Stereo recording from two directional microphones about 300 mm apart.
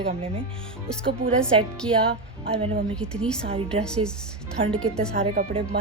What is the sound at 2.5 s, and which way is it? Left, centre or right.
Speech, centre.